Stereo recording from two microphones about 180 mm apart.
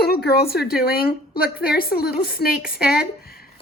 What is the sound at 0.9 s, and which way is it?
A woman's voice, 60° left (ahead or behind).